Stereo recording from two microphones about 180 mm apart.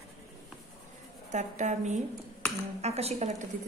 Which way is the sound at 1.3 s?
40° right (ahead or behind).